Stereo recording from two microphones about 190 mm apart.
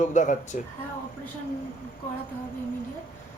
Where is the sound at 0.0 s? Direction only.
40° left (ahead or behind).